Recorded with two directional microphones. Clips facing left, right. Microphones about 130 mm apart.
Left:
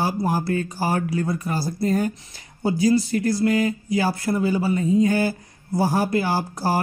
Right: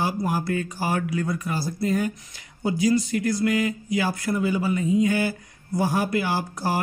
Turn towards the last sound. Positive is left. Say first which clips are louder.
# left 3 dB
turn(degrees=35)  # may be behind; listen again after turning